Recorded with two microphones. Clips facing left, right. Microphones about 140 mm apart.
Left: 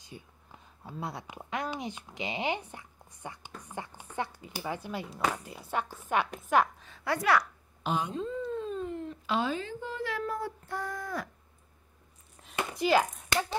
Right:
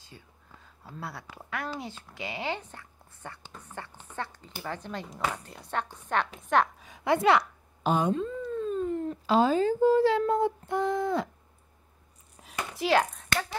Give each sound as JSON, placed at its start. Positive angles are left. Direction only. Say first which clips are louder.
{"t": 0.0, "sound": "a woman's voice", "louder": "left 4 dB", "side_deg": 20}
{"t": 6.8, "sound": "a woman's voice", "louder": "right 6 dB", "side_deg": -15}
{"t": 7.2, "sound": "a woman's voice", "louder": "right 3 dB", "side_deg": -25}
{"t": 7.8, "sound": "a sound", "louder": "right 6 dB", "side_deg": -45}
{"t": 12.7, "sound": "speech", "louder": "right 1 dB", "side_deg": 0}
{"t": 13.3, "sound": "a sound", "louder": "left 1 dB", "side_deg": 20}